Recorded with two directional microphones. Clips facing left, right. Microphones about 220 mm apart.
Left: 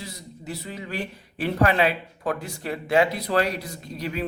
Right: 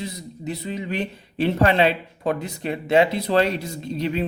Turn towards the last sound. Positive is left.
turn(degrees=-25)  # may be behind; listen again after turning